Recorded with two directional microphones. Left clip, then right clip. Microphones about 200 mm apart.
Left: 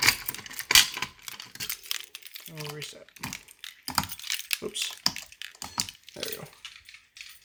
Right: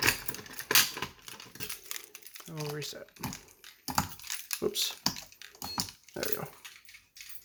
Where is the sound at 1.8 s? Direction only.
5° right (ahead or behind).